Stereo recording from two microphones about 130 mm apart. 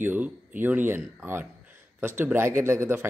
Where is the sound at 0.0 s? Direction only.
15° right (ahead or behind).